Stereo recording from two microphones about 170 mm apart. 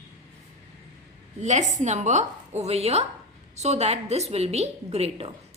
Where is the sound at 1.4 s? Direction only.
45° right (ahead or behind).